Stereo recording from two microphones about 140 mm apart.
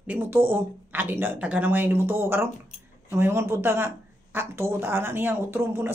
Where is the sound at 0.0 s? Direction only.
10° right (ahead or behind).